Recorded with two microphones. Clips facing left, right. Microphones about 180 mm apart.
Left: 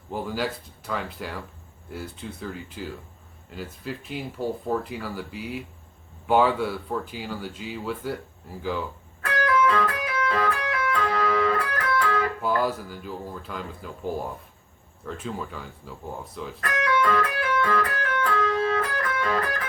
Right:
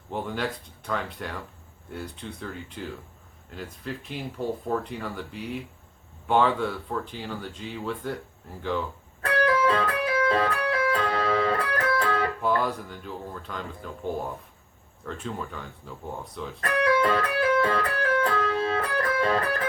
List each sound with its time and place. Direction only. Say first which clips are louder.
0.1 s speech: left 1 dB; 5° left (ahead or behind)
9.3 s music: even; 30° right (ahead or behind)
12.4 s speech: left 1 dB; 5° left (ahead or behind)
16.6 s music: right 2 dB; 30° right (ahead or behind)